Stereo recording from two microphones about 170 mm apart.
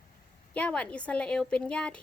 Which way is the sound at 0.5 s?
10° left (ahead or behind).